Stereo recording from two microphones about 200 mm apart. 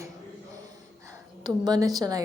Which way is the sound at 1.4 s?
20° right (ahead or behind).